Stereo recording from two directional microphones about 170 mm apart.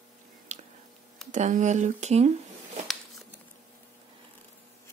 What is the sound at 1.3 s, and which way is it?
Speech, 45° right (ahead or behind).